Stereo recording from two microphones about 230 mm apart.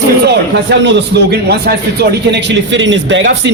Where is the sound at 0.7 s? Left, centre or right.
Right.